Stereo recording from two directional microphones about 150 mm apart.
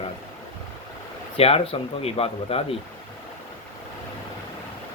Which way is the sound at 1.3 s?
40° left (ahead or behind).